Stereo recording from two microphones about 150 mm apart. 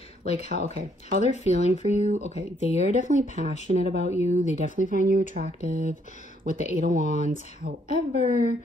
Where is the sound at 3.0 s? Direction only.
60° right (ahead or behind).